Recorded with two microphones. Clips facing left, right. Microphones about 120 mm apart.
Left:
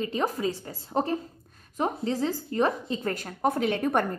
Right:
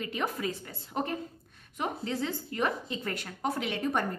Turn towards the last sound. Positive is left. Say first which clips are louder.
# left 5 dB
turn(degrees=55)  # may be behind; listen again after turning